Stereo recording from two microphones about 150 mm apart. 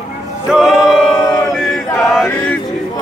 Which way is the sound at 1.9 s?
5° left (ahead or behind).